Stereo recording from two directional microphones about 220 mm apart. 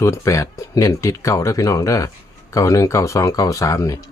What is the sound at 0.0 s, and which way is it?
Speech, 15° left (ahead or behind).